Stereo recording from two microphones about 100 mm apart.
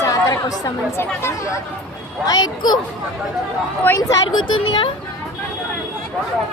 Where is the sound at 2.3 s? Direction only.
45° left (ahead or behind).